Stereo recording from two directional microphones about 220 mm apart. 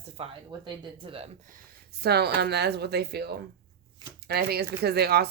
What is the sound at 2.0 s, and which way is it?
Speech, 45° right (ahead or behind).